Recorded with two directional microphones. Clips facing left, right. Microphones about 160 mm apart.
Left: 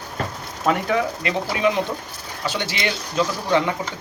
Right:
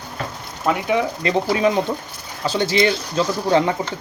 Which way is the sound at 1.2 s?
35° right (ahead or behind).